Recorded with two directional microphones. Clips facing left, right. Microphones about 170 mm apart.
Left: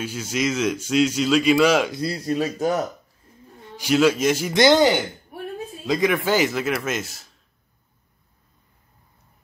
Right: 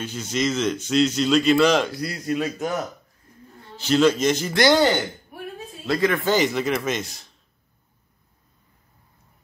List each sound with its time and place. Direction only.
0.0 s a man's voice: 10° left (ahead or behind)
1.9 s speech: 25° left (ahead or behind)
3.7 s a man's voice: 10° left (ahead or behind)
4.6 s a man's voice: 20° left (ahead or behind); by 7.2 s 5° left (ahead or behind)